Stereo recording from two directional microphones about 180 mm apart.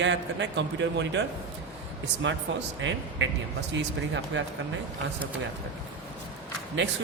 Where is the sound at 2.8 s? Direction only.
90° right.